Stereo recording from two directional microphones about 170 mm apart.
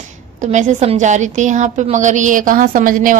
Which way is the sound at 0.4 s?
45° right (ahead or behind).